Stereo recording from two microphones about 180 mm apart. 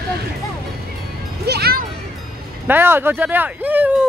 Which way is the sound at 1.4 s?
60° right (ahead or behind).